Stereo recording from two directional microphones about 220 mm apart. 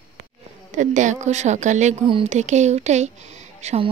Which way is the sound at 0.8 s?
35° right (ahead or behind).